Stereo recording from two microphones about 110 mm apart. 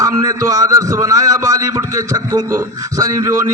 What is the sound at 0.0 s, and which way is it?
A man's voice, 30° right (ahead or behind).